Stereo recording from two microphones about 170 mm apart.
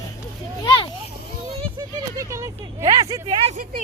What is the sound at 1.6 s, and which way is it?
Speech, 20° right (ahead or behind).